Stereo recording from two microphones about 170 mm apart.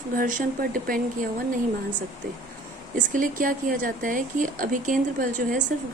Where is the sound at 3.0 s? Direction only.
55° right (ahead or behind).